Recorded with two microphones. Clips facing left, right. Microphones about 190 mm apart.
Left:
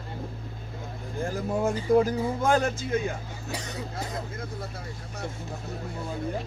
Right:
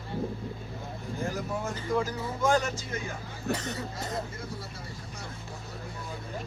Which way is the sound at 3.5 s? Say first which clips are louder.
Right 5 dB; 60° right (ahead or behind).